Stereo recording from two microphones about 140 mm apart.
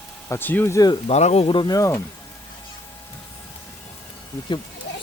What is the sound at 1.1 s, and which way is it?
Speech, 50° left (ahead or behind).